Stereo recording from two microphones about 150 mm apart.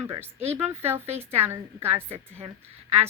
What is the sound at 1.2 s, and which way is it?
A woman's voice, 15° right (ahead or behind).